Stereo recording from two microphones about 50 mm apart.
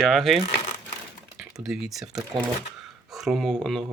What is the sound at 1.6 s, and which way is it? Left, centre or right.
Speech, centre.